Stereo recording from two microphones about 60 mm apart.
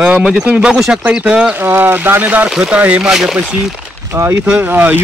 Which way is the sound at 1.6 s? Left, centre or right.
Right.